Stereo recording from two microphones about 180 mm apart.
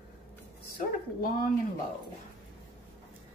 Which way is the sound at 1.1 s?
55° left (ahead or behind).